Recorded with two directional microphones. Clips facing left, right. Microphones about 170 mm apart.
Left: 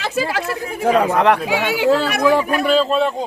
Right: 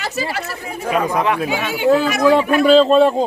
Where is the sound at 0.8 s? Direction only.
75° left (ahead or behind).